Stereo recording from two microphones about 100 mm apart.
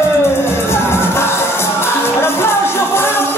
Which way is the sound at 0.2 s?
25° left (ahead or behind).